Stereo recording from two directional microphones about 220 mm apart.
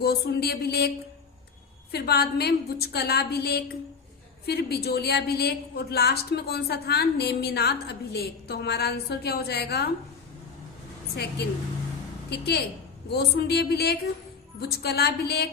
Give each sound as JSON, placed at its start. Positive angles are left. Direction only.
{"t": 0.0, "sound": "a woman's voice", "side_deg": 45}
{"t": 12.3, "sound": "a woman's voice", "side_deg": 45}